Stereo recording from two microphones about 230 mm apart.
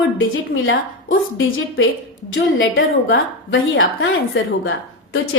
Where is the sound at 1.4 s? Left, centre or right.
Left.